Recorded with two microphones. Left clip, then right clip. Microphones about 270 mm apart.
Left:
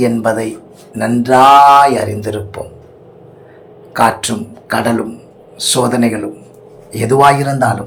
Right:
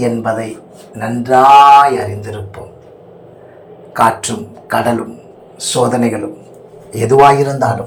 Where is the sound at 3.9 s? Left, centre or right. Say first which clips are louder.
Even; left.